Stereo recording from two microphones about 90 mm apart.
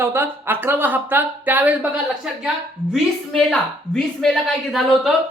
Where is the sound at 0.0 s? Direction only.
25° right (ahead or behind).